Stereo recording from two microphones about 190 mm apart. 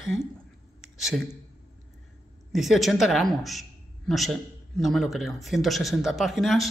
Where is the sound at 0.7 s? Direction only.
Centre (ahead or behind).